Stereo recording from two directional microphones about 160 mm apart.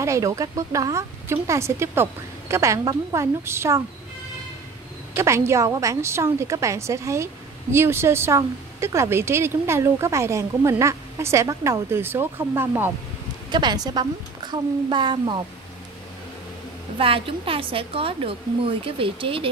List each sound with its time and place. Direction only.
0.0 s speech: 20° right (ahead or behind)
5.1 s a woman's voice: 15° right (ahead or behind)
13.5 s speech: 25° right (ahead or behind)
17.0 s a woman's voice: 35° right (ahead or behind)